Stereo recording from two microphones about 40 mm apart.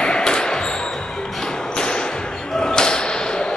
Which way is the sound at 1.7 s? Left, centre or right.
Left.